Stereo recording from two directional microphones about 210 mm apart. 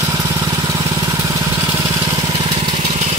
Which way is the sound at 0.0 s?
15° right (ahead or behind).